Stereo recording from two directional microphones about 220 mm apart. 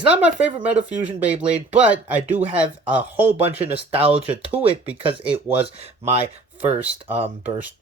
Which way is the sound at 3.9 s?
25° right (ahead or behind).